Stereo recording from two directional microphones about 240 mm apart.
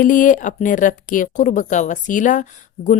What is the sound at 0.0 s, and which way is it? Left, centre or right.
Speech, left.